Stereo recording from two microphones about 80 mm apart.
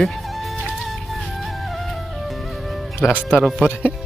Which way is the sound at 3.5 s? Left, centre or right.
Centre.